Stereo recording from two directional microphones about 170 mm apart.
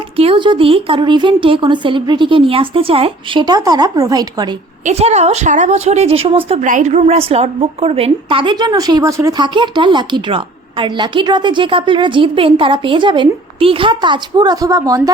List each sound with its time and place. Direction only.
0.2 s a woman's voice: 30° right (ahead or behind)
4.9 s a woman's voice: 40° right (ahead or behind)
6.7 s a woman's voice: 45° right (ahead or behind); by 15.1 s 20° right (ahead or behind)